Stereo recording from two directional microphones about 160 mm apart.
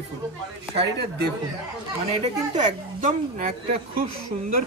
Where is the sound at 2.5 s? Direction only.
50° right (ahead or behind).